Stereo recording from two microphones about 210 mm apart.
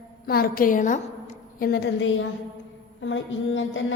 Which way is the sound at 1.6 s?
50° left (ahead or behind).